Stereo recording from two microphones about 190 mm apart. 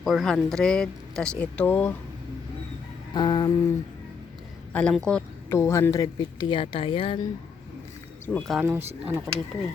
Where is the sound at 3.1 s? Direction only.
25° left (ahead or behind).